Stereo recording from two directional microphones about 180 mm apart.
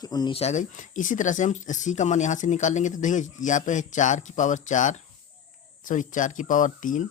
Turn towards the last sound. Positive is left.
turn(degrees=45)  # may be behind; listen again after turning